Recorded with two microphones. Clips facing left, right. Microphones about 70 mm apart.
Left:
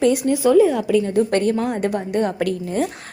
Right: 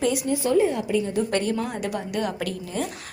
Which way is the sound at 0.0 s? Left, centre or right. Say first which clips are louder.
Left 7 dB; left.